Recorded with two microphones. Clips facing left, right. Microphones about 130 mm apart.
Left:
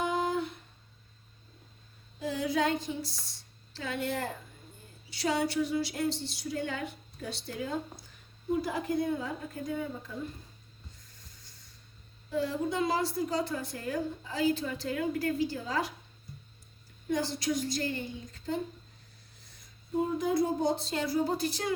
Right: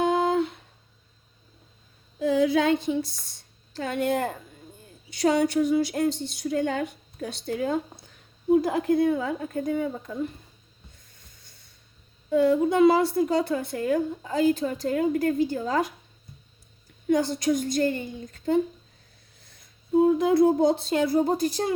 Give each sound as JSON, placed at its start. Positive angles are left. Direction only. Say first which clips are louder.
{"t": 0.0, "sound": "humming", "louder": "right 8 dB", "side_deg": -70}
{"t": 2.3, "sound": "female singing", "louder": "right 8 dB", "side_deg": -90}
{"t": 3.7, "sound": "a woman's voice", "louder": "right 8 dB", "side_deg": -50}
{"t": 12.3, "sound": "a woman's voice", "louder": "right 10 dB", "side_deg": -60}
{"t": 17.1, "sound": "a woman's voice", "louder": "right 8 dB", "side_deg": -50}
{"t": 20.1, "sound": "a sound", "louder": "right 8 dB", "side_deg": -75}
{"t": 20.4, "sound": "a woman's voice", "louder": "right 9 dB", "side_deg": -55}